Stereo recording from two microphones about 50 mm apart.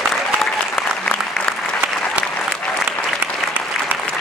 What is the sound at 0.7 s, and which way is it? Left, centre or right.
Applause, centre.